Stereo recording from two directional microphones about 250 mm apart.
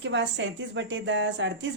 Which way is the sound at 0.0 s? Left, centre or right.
Right.